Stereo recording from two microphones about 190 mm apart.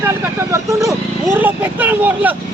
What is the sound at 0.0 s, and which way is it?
Speech, 15° right (ahead or behind).